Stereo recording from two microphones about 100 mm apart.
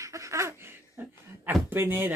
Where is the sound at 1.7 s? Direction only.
20° right (ahead or behind).